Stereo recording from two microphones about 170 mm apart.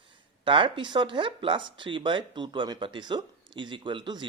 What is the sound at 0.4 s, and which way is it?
Speech, 30° right (ahead or behind).